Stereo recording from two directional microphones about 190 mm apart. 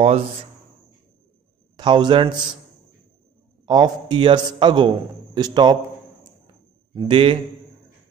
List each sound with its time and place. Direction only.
0.0 s speech: 35° right (ahead or behind)
1.8 s a man's voice: 25° right (ahead or behind)
3.6 s a man's voice: 20° right (ahead or behind)
6.9 s a man's voice: 25° right (ahead or behind)